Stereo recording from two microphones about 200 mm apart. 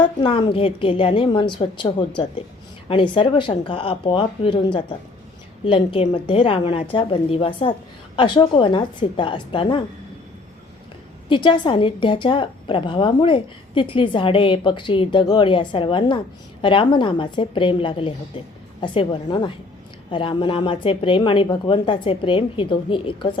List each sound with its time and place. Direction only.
0.2 s a woman's voice: 25° left (ahead or behind)
11.3 s a woman's voice: 25° left (ahead or behind)